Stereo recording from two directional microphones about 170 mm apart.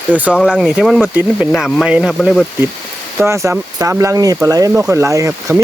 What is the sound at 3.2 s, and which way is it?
Speech, 15° right (ahead or behind).